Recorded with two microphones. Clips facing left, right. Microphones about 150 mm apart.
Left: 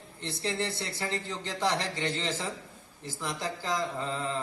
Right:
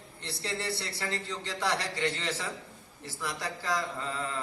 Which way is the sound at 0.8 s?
25° left (ahead or behind).